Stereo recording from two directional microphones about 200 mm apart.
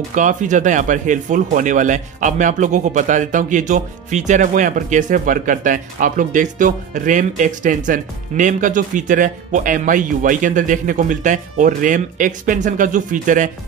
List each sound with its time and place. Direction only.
0.1 s speech: 40° right (ahead or behind)